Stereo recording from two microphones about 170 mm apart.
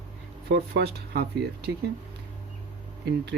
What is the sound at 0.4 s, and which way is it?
Speech, 80° right.